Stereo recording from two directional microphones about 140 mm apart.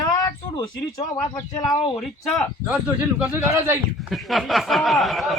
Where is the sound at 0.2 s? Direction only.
30° left (ahead or behind).